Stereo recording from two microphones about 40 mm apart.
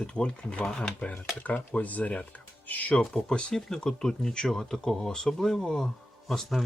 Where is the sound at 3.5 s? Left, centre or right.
Centre.